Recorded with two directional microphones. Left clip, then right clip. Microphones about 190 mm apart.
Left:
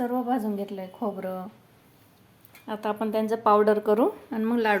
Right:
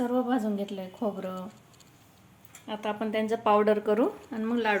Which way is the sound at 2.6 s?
25° left (ahead or behind).